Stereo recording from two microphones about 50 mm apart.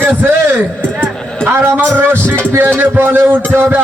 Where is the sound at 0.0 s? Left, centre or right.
Right.